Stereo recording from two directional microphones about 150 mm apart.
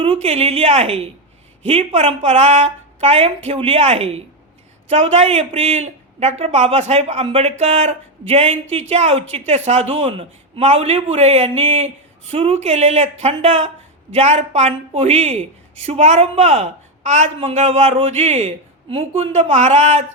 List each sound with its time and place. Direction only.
0.0 s a woman's voice: 40° right (ahead or behind)